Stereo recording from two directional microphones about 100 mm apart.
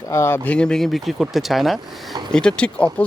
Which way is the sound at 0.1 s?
30° left (ahead or behind).